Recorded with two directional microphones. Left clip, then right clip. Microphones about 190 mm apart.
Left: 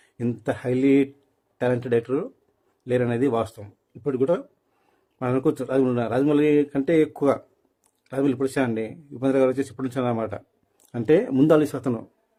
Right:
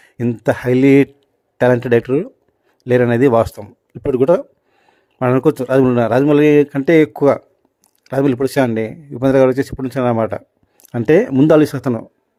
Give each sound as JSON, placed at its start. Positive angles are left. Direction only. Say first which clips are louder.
{"t": 0.0, "sound": "speech", "louder": "right 10 dB", "side_deg": -30}